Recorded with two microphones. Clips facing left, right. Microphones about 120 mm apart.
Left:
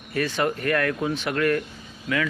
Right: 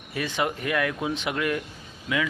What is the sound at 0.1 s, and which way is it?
Speech, 15° right (ahead or behind).